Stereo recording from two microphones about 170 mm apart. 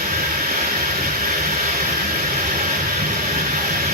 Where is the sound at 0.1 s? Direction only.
55° right (ahead or behind).